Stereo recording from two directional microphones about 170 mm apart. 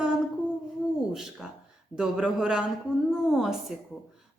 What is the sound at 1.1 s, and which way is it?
A woman's voice, centre (ahead or behind).